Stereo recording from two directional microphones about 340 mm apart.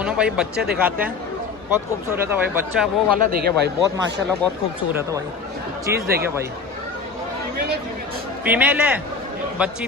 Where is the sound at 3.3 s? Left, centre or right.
Right.